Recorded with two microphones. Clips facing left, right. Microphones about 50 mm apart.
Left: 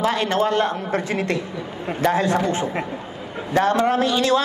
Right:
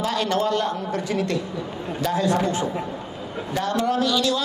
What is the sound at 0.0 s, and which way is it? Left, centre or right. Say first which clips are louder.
A woman's voice: left 3 dB; left.